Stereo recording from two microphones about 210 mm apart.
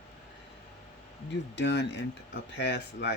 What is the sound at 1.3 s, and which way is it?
Speech, 55° left (ahead or behind).